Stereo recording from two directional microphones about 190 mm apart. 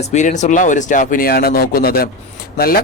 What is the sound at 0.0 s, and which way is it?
Speech, 40° left (ahead or behind).